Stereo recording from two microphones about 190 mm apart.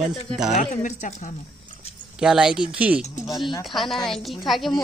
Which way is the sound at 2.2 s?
5° right (ahead or behind).